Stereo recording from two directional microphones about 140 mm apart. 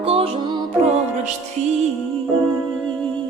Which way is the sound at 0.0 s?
45° right (ahead or behind).